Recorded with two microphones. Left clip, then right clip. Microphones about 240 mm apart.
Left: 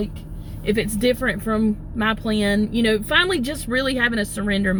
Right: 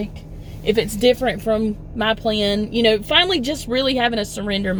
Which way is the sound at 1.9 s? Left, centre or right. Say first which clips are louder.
Right 4 dB; right.